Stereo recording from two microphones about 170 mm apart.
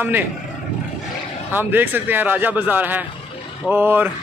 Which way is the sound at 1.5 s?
10° right (ahead or behind).